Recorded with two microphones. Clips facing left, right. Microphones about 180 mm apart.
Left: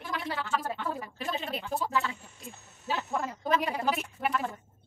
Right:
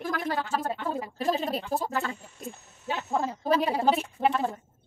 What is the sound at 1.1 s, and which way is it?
Speech, 40° right (ahead or behind).